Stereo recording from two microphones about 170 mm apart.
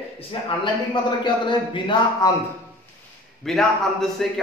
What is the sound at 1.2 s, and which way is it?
Speech, 25° left (ahead or behind).